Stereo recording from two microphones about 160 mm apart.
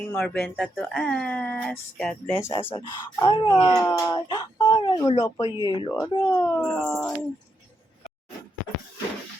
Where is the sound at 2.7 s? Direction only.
30° left (ahead or behind).